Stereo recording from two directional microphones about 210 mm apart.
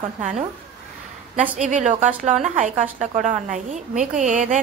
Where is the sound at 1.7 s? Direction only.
35° right (ahead or behind).